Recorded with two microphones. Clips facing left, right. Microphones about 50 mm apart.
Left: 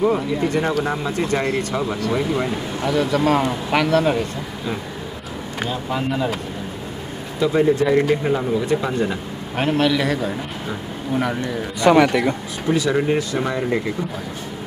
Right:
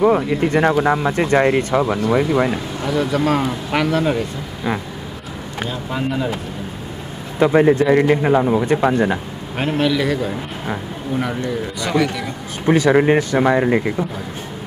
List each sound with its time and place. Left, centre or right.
0.3 s speech: right
2.8 s speech: centre
5.7 s speech: centre
7.3 s speech: right
9.6 s speech: centre
11.8 s speech: left
12.6 s speech: right